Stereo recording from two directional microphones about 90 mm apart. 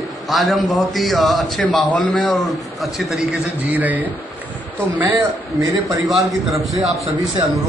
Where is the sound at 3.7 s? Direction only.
20° right (ahead or behind).